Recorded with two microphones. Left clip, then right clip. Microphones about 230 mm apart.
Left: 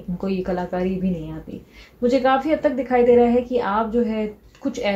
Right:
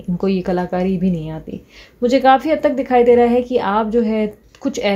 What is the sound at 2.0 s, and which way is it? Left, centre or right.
A woman's voice, right.